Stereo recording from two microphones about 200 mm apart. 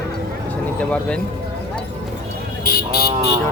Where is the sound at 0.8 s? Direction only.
5° left (ahead or behind).